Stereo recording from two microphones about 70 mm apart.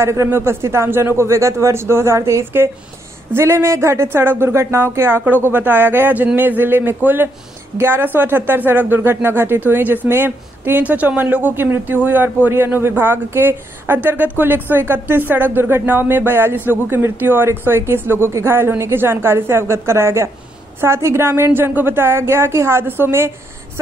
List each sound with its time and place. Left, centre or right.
0.0 s speech: right